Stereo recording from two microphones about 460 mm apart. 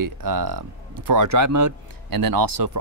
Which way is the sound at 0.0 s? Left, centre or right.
Right.